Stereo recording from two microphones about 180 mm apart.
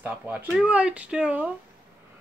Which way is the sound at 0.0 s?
10° right (ahead or behind).